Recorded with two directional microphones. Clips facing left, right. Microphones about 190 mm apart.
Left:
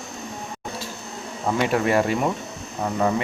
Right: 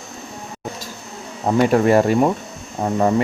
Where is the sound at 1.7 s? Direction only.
40° right (ahead or behind).